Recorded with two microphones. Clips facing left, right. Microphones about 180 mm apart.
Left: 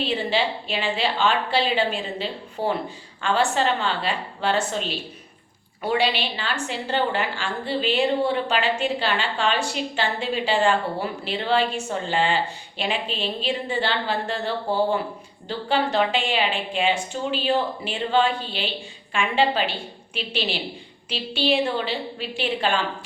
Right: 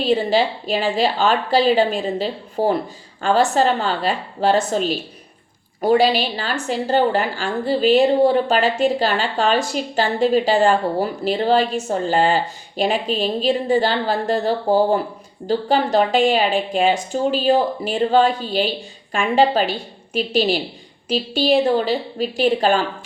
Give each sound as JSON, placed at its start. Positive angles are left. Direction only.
{"t": 0.0, "sound": "a woman's voice", "side_deg": -40}